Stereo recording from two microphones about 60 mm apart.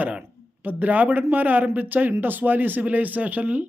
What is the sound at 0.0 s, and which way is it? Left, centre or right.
A man's voice, right.